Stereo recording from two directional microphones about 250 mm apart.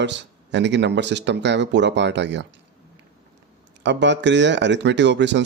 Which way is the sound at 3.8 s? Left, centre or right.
Right.